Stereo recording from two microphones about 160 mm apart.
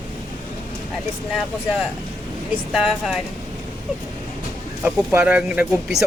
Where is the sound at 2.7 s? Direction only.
Centre (ahead or behind).